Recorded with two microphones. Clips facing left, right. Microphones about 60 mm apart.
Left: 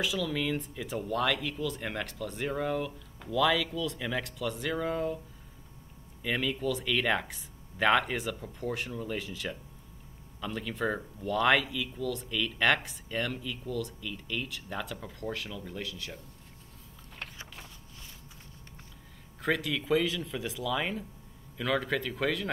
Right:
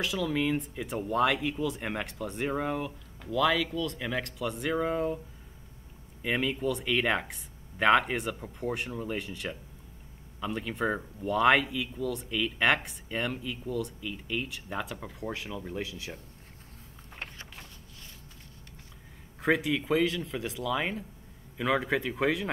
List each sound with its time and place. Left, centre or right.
0.2 s speech: centre
3.3 s speech: centre
6.2 s speech: centre
8.9 s speech: centre
9.2 s speech: centre
19.4 s speech: centre
19.7 s speech: centre
21.5 s speech: centre